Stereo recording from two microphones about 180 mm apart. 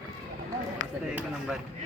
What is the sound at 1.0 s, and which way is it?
Speech, 5° right (ahead or behind).